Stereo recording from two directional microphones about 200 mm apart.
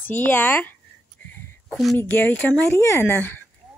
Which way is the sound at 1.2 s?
10° left (ahead or behind).